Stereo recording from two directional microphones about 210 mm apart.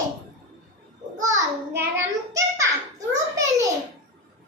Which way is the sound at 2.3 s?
15° right (ahead or behind).